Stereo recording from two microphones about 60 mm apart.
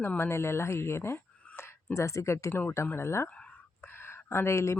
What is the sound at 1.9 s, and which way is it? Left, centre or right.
A woman's voice, left.